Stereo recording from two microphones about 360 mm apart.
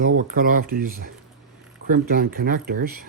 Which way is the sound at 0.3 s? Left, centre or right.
Right.